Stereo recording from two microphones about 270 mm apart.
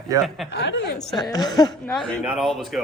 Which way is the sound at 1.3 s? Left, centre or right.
Centre.